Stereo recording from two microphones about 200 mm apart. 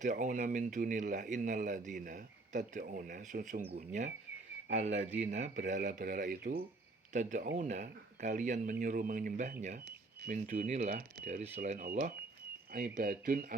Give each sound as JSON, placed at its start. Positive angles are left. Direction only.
{"t": 0.0, "sound": "speech", "side_deg": -40}
{"t": 4.7, "sound": "speech", "side_deg": -35}